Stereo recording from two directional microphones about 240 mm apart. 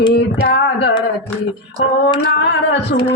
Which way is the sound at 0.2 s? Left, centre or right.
Left.